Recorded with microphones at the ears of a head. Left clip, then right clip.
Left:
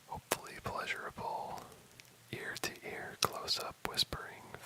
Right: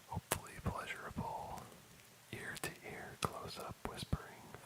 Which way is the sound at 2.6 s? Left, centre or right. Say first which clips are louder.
Left 5 dB; left.